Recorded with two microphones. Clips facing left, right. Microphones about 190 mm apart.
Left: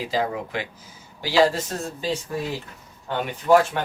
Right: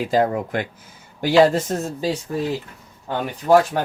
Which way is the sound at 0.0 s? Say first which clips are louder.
Right 6 dB; 50° right (ahead or behind).